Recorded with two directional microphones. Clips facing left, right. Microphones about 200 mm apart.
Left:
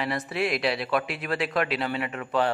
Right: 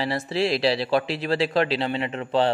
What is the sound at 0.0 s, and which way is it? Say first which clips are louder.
Speech: right 3 dB; 30° right (ahead or behind).